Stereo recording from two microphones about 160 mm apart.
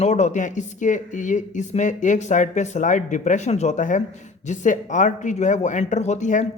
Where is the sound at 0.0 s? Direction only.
45° left (ahead or behind).